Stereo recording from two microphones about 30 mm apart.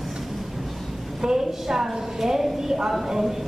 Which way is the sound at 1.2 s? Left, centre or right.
Centre.